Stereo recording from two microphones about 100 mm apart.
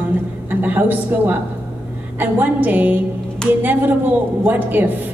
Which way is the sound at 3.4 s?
10° left (ahead or behind).